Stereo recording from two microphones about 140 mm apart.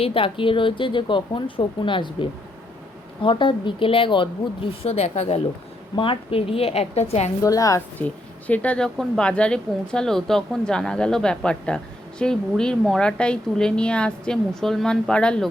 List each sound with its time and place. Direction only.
0.0 s speech: 40° left (ahead or behind)
3.2 s a woman's voice: 35° left (ahead or behind)
6.0 s a woman's voice: 40° left (ahead or behind)
7.4 s a woman's voice: 25° left (ahead or behind)
7.9 s speech: 10° left (ahead or behind)